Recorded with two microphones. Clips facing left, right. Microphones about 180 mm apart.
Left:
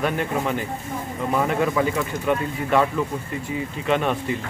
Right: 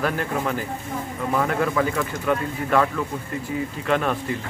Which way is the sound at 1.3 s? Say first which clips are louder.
Left 1 dB; 15° left (ahead or behind).